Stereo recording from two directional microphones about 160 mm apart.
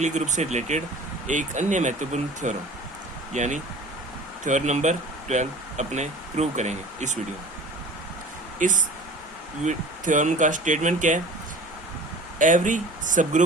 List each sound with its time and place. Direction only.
0.0 s speech: 45° right (ahead or behind)
8.5 s speech: 55° right (ahead or behind)
12.4 s speech: 55° right (ahead or behind)